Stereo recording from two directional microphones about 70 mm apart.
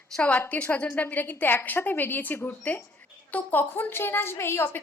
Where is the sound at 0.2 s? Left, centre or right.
Centre.